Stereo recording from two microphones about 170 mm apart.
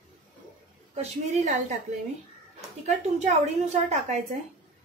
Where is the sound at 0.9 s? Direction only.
40° right (ahead or behind).